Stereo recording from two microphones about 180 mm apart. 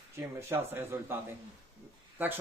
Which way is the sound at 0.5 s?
15° right (ahead or behind).